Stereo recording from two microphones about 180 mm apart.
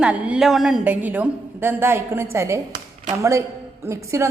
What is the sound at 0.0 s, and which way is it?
A woman's voice, 5° right (ahead or behind).